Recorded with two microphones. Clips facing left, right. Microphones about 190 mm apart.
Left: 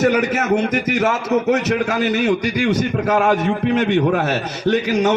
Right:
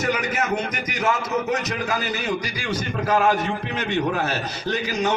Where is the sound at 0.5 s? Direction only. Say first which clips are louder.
Left 9 dB; 70° left (ahead or behind).